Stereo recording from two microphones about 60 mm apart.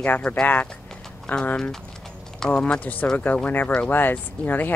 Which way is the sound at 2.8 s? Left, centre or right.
Left.